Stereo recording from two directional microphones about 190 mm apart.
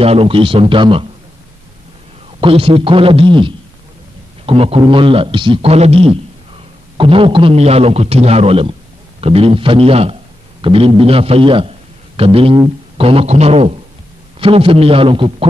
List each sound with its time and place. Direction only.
0.0 s a man's voice: 30° right (ahead or behind)
2.4 s a man's voice: 30° right (ahead or behind)